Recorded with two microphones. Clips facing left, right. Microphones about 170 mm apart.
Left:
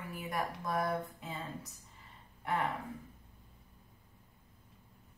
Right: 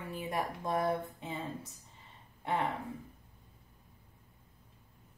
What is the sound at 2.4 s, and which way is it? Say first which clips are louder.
Speech: right 1 dB; 25° right (ahead or behind).